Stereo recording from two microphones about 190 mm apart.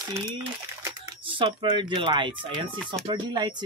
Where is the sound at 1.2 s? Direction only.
25° right (ahead or behind).